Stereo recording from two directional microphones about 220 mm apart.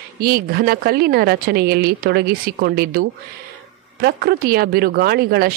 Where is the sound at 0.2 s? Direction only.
45° right (ahead or behind).